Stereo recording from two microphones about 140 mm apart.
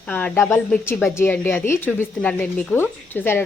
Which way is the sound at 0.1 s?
10° left (ahead or behind).